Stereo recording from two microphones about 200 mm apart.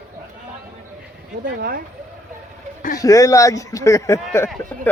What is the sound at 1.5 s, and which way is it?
Speech, 45° right (ahead or behind).